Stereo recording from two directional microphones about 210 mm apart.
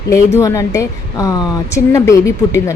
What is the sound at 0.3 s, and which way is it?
Speech, 15° left (ahead or behind).